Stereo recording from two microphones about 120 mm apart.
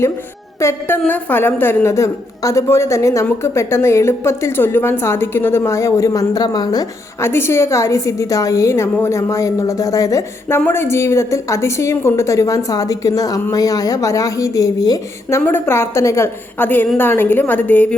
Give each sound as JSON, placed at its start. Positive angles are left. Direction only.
{"t": 0.6, "sound": "a woman's voice", "side_deg": 20}
{"t": 7.2, "sound": "a woman's voice", "side_deg": 20}